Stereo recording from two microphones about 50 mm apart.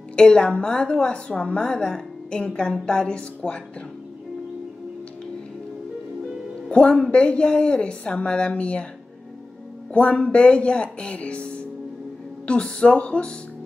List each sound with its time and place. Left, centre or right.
0.1 s a woman's voice: centre
6.7 s speech: left
9.9 s speech: left